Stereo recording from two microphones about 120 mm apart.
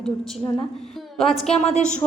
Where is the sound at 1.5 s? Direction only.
65° left (ahead or behind).